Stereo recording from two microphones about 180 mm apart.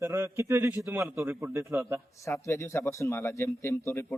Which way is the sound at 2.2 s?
15° left (ahead or behind).